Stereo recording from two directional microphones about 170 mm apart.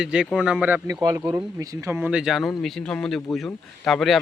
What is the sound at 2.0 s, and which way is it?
Speech, 5° right (ahead or behind).